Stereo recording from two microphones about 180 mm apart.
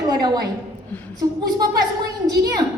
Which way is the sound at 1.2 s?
20° right (ahead or behind).